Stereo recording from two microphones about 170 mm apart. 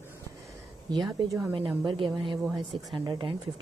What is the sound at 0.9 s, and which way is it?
A woman's voice, 25° right (ahead or behind).